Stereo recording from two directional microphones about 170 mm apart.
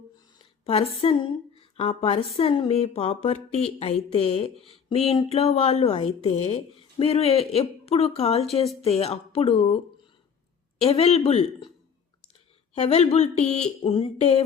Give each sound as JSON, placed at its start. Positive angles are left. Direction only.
{"t": 0.6, "sound": "a woman's voice", "side_deg": 35}
{"t": 12.7, "sound": "a woman's voice", "side_deg": 40}